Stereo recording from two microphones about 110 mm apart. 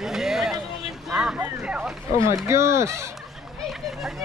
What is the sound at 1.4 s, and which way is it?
Speech, 10° right (ahead or behind).